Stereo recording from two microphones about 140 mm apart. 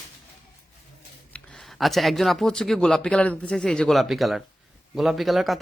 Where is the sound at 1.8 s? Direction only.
Centre (ahead or behind).